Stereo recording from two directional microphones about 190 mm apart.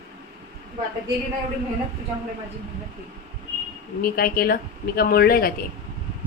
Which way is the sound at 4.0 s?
50° left (ahead or behind).